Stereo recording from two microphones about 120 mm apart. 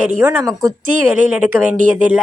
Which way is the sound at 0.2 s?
20° right (ahead or behind).